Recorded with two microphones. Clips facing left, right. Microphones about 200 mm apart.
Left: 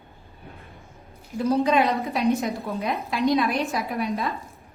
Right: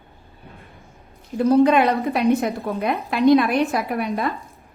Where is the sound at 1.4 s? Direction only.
55° right (ahead or behind).